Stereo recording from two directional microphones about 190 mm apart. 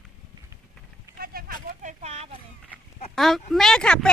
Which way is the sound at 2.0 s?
35° right (ahead or behind).